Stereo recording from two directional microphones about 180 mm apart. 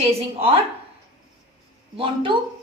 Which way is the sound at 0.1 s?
35° right (ahead or behind).